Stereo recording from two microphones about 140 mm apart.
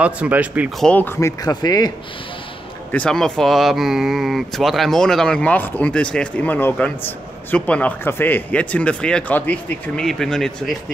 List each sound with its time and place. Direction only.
0.0 s speech: 10° right (ahead or behind)
0.7 s speech: 10° left (ahead or behind); by 1.9 s 30° left (ahead or behind)
2.9 s speech: 5° left (ahead or behind)